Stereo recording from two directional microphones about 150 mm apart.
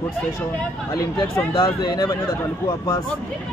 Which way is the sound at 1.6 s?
25° left (ahead or behind).